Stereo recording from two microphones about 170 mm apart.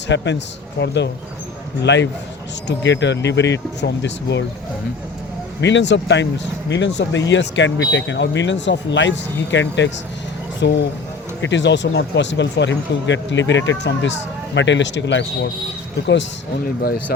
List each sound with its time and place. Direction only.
0.1 s speech: 90° left
5.5 s speech: 90° left
16.8 s speech: 65° left (ahead or behind)